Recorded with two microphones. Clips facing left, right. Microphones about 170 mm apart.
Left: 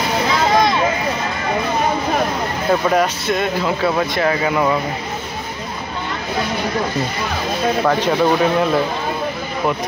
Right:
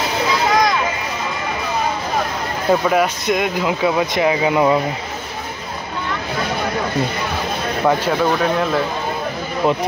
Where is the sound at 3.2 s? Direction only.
15° right (ahead or behind).